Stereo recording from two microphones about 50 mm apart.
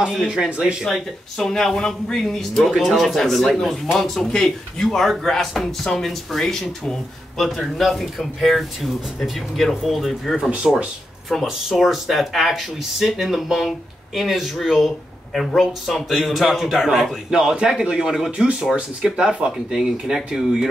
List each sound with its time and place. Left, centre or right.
0.8 s speech: centre
1.5 s a man's voice: centre
2.7 s a man's voice: centre
3.0 s a man's voice: centre